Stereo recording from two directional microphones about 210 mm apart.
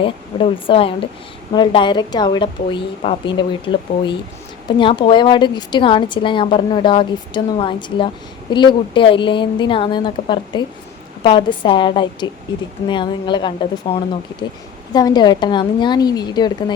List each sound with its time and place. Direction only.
0.0 s a woman's voice: 25° left (ahead or behind)